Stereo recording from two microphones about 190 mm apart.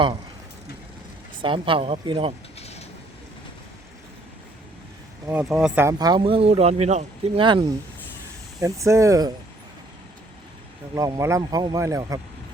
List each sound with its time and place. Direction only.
1.4 s speech: 25° right (ahead or behind)
2.6 s a sound: 35° left (ahead or behind)
5.3 s speech: 5° right (ahead or behind)
10.9 s speech: 15° right (ahead or behind)